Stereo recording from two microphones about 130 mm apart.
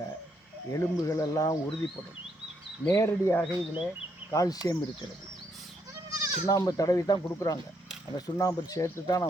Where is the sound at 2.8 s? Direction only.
25° left (ahead or behind).